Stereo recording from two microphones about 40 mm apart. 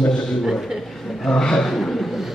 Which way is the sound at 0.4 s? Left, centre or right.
Centre.